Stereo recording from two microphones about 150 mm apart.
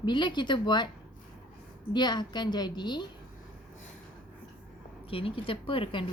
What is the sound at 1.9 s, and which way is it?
A woman's voice, 30° left (ahead or behind).